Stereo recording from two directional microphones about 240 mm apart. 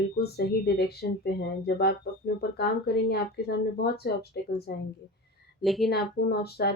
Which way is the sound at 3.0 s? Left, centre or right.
Left.